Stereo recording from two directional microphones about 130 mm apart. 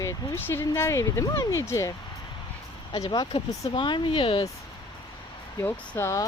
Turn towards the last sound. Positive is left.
turn(degrees=20)  # may be behind; listen again after turning